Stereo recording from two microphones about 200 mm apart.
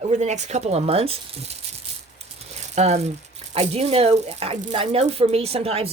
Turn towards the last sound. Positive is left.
turn(degrees=-30)  # may be behind; listen again after turning